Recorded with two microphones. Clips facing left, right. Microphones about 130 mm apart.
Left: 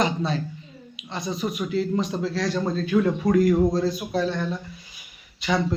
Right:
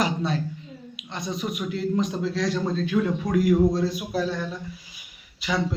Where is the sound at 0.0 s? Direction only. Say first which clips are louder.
Left 1 dB; centre (ahead or behind).